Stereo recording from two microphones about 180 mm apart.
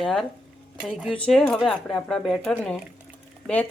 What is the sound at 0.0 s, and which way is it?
Speech, centre (ahead or behind).